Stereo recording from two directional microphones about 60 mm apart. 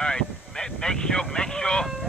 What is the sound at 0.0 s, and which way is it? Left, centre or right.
Vehicle, centre.